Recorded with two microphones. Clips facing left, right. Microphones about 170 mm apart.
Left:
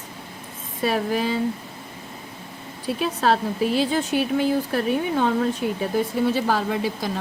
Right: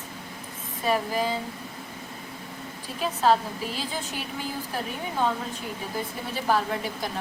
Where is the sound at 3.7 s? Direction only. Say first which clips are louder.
Left 12 dB; 70° left (ahead or behind).